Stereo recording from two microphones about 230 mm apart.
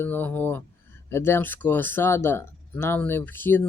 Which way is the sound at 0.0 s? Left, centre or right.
Centre.